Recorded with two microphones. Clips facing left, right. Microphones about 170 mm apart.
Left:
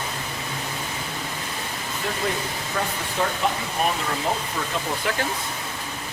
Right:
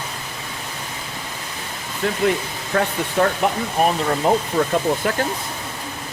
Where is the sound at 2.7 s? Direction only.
75° right (ahead or behind).